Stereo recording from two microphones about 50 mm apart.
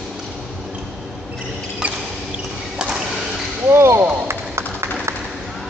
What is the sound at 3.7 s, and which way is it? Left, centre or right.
Basketball bounce, right.